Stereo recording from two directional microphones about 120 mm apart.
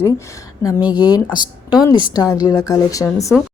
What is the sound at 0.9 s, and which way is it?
Speech, 35° left (ahead or behind).